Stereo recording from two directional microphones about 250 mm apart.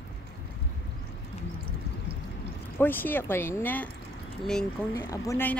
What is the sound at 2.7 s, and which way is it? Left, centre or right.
Speech, centre.